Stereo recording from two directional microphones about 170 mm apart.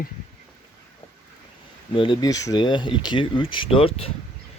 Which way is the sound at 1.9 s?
30° left (ahead or behind).